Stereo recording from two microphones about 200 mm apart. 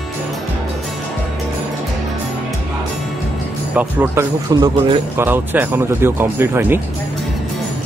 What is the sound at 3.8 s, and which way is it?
Speech, 10° right (ahead or behind).